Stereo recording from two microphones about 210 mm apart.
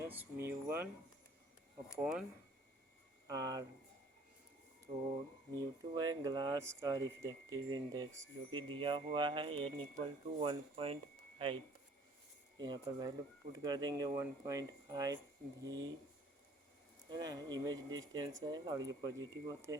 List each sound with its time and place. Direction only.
0.0 s speech: 10° right (ahead or behind)
2.0 s speech: 5° right (ahead or behind)
3.2 s speech: 15° right (ahead or behind)
4.9 s speech: 25° right (ahead or behind)
17.1 s speech: 20° right (ahead or behind)